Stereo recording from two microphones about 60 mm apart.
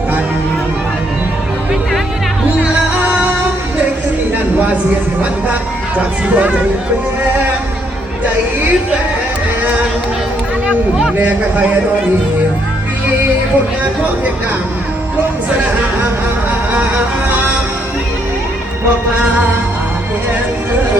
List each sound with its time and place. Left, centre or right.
6.3 s a man's voice: right
11.2 s a man's voice: right